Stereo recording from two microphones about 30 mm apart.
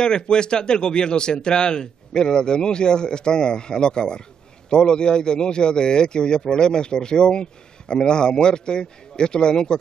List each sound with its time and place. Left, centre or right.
0.0 s a man's voice: left